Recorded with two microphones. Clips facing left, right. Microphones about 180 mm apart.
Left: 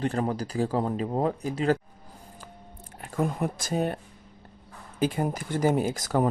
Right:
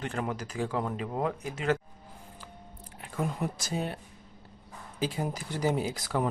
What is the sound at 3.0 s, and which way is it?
Speech, 50° left (ahead or behind).